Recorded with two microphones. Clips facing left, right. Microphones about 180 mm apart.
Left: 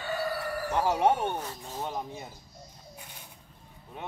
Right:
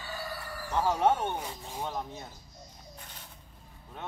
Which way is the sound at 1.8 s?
10° left (ahead or behind).